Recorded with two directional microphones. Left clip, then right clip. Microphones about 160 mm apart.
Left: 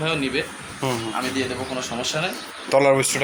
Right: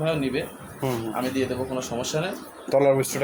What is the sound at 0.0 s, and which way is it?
Speech, 80° right.